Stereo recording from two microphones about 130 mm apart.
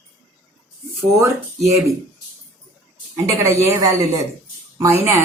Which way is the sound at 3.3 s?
20° right (ahead or behind).